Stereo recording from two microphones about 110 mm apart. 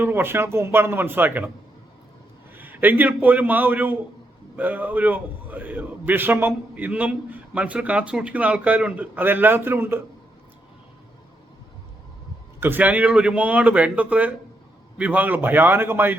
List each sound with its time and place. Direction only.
0.0 s speech: 20° right (ahead or behind)
2.6 s a man's voice: 15° right (ahead or behind)
12.5 s a man's voice: 20° right (ahead or behind)